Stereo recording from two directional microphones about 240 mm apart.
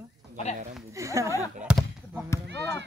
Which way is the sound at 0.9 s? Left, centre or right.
Centre.